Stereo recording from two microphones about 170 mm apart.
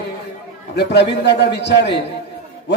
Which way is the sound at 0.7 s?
80° left.